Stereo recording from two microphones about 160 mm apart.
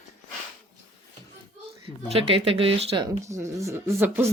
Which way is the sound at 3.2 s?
20° right (ahead or behind).